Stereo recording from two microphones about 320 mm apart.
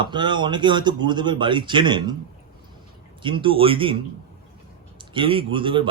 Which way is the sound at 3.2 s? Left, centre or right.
Centre.